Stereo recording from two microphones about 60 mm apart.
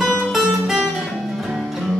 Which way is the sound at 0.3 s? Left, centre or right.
Centre.